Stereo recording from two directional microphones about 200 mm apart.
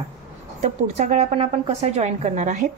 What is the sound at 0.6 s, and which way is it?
A woman's voice, 35° right (ahead or behind).